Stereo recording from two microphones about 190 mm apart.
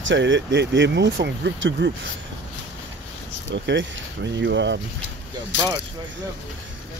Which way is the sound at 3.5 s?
70° right (ahead or behind).